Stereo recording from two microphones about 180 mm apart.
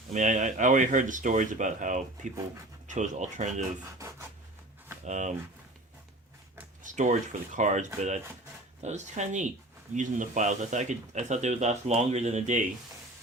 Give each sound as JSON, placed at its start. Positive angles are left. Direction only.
{"t": 0.1, "sound": "speech", "side_deg": -45}
{"t": 5.0, "sound": "speech", "side_deg": -40}
{"t": 6.8, "sound": "speech", "side_deg": -45}